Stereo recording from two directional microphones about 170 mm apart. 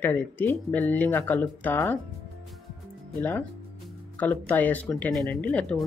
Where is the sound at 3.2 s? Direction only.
10° left (ahead or behind).